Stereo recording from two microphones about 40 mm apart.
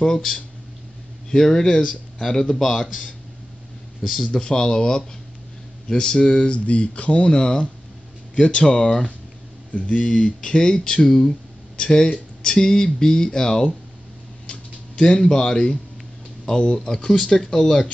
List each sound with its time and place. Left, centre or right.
0.0 s speech: centre
4.0 s speech: centre
4.3 s speech: centre
7.2 s speech: left
14.4 s a sound: left
16.4 s speech: left